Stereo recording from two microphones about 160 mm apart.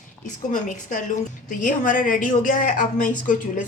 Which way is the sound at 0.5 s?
55° left (ahead or behind).